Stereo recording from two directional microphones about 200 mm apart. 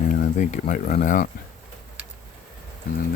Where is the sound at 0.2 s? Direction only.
40° left (ahead or behind).